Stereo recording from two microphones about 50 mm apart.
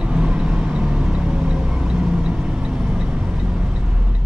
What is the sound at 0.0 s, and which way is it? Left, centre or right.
Vehicle, centre.